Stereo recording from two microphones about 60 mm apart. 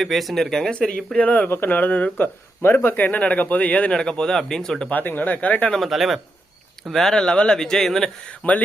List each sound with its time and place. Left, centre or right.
0.0 s speech: centre
4.9 s speech: left
5.6 s speech: centre
5.9 s speech: centre
8.4 s speech: left